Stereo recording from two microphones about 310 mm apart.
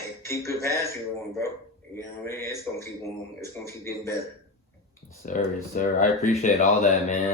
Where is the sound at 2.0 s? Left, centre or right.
Centre.